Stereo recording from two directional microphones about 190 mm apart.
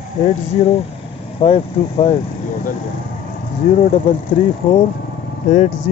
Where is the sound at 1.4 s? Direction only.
30° left (ahead or behind).